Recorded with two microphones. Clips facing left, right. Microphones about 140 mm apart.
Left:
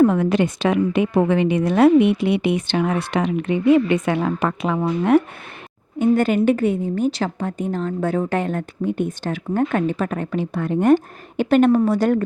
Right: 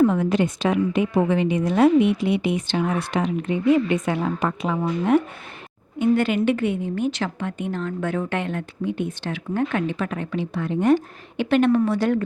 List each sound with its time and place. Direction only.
0.0 s a woman's voice: 65° left (ahead or behind)
6.0 s a woman's voice: 45° left (ahead or behind)